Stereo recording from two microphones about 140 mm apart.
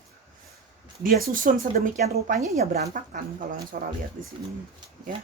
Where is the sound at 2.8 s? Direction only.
70° right (ahead or behind).